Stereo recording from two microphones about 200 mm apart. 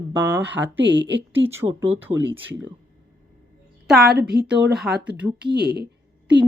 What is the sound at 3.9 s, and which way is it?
Speech, 50° right (ahead or behind).